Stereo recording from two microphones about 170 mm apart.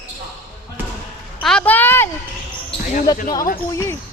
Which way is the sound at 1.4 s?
5° left (ahead or behind).